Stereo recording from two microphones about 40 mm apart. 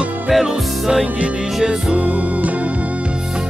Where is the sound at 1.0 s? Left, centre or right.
Right.